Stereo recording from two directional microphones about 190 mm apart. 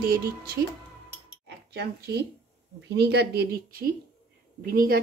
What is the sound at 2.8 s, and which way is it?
A woman's voice, 65° right (ahead or behind).